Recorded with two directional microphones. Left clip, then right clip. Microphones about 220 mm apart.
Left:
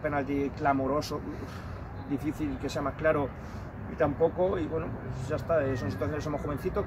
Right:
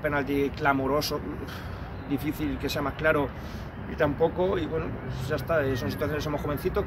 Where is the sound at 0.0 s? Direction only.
5° left (ahead or behind).